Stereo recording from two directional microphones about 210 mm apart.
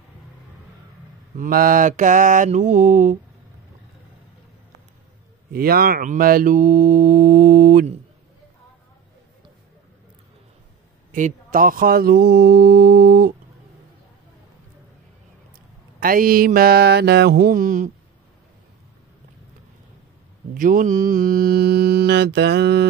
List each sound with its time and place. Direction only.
1.4 s mantra: 40° right (ahead or behind)
5.5 s speech: 45° right (ahead or behind)
11.1 s speech: 40° right (ahead or behind)
16.0 s speech: 40° right (ahead or behind)
20.5 s speech: 40° right (ahead or behind)